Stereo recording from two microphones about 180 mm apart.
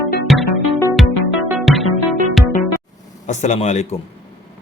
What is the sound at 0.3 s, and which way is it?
Music, centre (ahead or behind).